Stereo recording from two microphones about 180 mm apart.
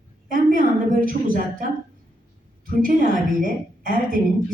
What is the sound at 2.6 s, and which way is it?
A woman's voice, 50° right (ahead or behind).